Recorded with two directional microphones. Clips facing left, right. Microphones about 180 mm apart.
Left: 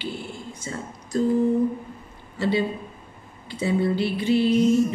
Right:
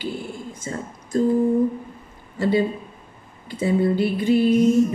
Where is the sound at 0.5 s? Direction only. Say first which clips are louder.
Right 3 dB; 50° right (ahead or behind).